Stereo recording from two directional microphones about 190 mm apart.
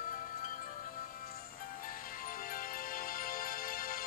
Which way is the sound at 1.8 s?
45° left (ahead or behind).